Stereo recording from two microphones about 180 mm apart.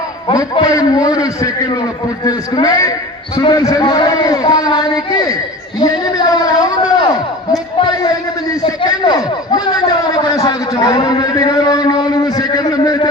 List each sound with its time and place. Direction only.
0.3 s a man's voice: 25° left (ahead or behind)
8.6 s a man's voice: 25° left (ahead or behind)